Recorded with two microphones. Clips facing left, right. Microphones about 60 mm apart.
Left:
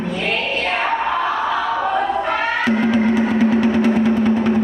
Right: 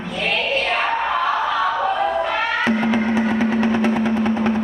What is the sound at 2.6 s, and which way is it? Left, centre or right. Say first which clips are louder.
Music: left 3 dB; right.